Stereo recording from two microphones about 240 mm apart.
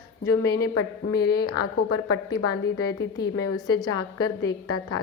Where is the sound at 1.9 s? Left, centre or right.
Left.